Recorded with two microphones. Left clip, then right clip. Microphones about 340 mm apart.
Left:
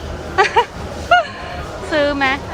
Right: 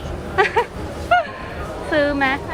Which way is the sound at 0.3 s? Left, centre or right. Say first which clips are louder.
Left 4 dB; centre.